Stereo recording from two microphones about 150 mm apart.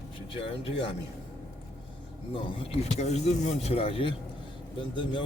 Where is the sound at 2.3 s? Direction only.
35° left (ahead or behind).